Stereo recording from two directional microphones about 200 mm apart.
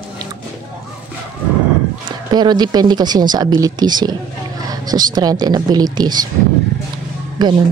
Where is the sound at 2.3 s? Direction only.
20° right (ahead or behind).